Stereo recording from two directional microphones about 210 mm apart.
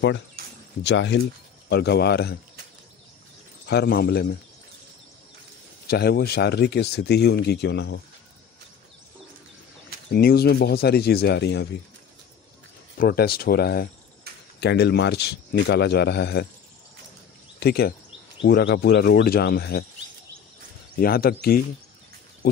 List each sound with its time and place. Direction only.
0.8 s speech: 60° left (ahead or behind)
3.6 s speech: 50° left (ahead or behind)
5.9 s speech: 45° left (ahead or behind)
10.1 s speech: 45° left (ahead or behind)
12.9 s speech: 45° left (ahead or behind)
17.6 s speech: 50° left (ahead or behind)
20.9 s speech: 45° left (ahead or behind)